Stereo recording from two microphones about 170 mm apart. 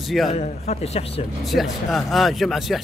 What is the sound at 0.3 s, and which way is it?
Speech, 40° left (ahead or behind).